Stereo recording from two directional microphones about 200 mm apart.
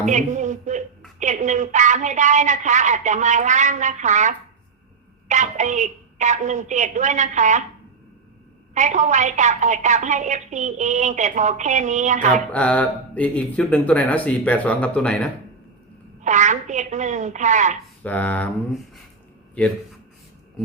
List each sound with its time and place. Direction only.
0.1 s a woman's voice: 35° right (ahead or behind)
8.7 s a woman's voice: 35° right (ahead or behind)
12.5 s speech: 5° left (ahead or behind)
16.2 s a woman's voice: 35° right (ahead or behind)
18.0 s speech: 10° left (ahead or behind)